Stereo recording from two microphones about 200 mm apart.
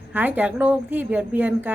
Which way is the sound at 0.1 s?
10° right (ahead or behind).